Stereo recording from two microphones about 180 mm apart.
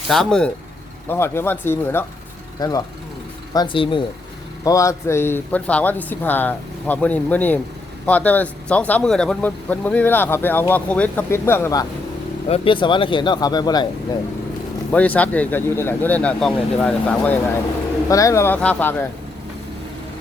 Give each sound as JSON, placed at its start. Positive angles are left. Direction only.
{"t": 0.1, "sound": "speech", "side_deg": 5}
{"t": 4.6, "sound": "speech", "side_deg": 20}
{"t": 12.5, "sound": "speech", "side_deg": 30}
{"t": 14.9, "sound": "speech", "side_deg": 10}